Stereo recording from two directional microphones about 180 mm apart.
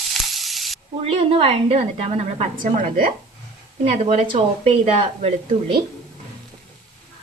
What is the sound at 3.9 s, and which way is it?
A woman's voice, 30° right (ahead or behind).